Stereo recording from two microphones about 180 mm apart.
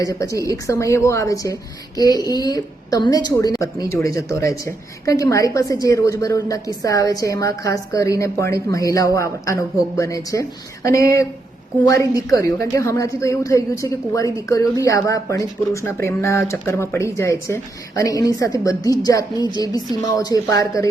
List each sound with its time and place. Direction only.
0.4 s a woman's voice: 15° left (ahead or behind)